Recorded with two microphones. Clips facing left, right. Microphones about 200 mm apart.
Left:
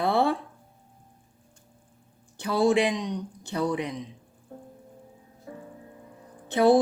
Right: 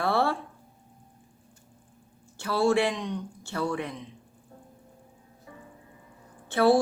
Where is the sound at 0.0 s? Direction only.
20° left (ahead or behind).